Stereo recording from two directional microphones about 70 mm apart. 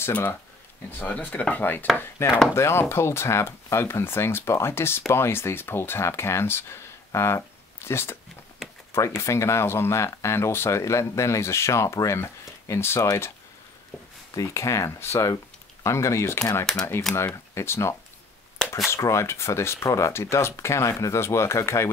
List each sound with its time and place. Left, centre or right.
0.1 s speech: left
14.3 s speech: left
18.9 s speech: left